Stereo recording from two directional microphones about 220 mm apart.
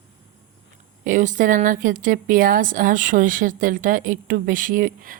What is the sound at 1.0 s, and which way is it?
Speech, 35° right (ahead or behind).